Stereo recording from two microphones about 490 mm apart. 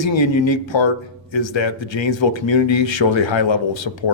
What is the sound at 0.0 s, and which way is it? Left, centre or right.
A man's voice, left.